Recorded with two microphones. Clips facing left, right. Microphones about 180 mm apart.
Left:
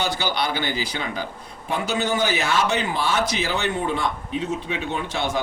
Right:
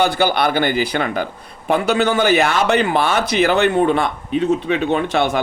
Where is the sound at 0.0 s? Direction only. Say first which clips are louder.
Right 8 dB; 55° right (ahead or behind).